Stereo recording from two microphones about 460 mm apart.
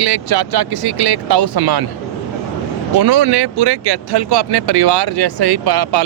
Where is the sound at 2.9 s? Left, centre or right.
Right.